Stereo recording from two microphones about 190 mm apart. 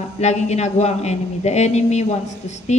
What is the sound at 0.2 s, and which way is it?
A man's voice, 35° left (ahead or behind).